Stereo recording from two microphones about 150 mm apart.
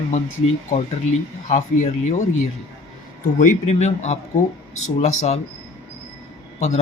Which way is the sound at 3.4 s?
50° left (ahead or behind).